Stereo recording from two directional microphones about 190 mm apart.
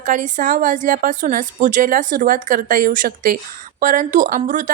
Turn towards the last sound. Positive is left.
turn(degrees=-45)  # may be behind; listen again after turning